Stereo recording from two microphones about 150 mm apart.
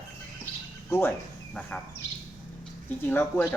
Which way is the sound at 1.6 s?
5° left (ahead or behind).